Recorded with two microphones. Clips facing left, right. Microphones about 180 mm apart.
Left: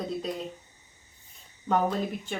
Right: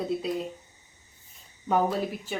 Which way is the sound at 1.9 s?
5° right (ahead or behind).